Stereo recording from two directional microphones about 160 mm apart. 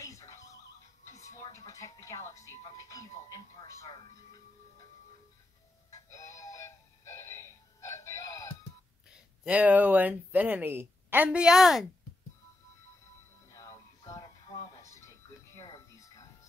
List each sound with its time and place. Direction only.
0.0 s music: 20° left (ahead or behind)
6.0 s synthetic singing: 20° left (ahead or behind)
9.1 s speech: 5° right (ahead or behind)
13.5 s music: 20° left (ahead or behind)